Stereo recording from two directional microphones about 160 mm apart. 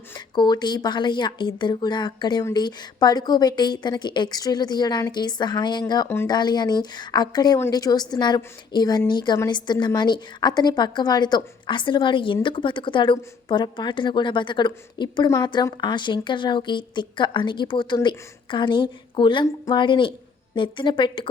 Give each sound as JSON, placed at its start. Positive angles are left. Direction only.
{"t": 0.3, "sound": "a woman's voice", "side_deg": 25}